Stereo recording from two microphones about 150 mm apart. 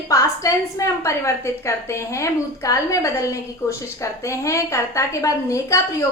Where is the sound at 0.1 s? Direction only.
20° left (ahead or behind).